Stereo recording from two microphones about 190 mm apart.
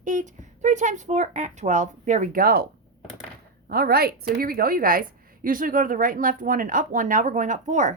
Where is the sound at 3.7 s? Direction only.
50° right (ahead or behind).